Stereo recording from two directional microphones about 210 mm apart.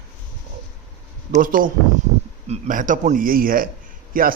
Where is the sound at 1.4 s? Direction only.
40° right (ahead or behind).